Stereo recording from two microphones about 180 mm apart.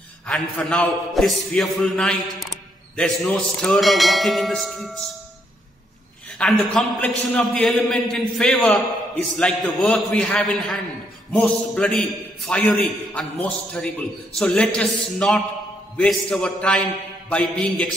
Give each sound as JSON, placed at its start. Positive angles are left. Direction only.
{"t": 0.3, "sound": "a man's voice", "side_deg": 5}
{"t": 6.3, "sound": "a man's voice", "side_deg": 5}